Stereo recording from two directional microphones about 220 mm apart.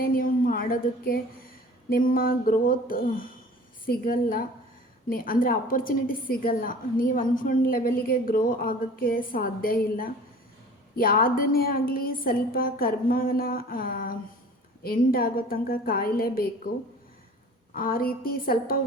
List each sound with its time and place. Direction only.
0.0 s a woman's voice: 40° left (ahead or behind)
17.7 s a woman's voice: 40° left (ahead or behind)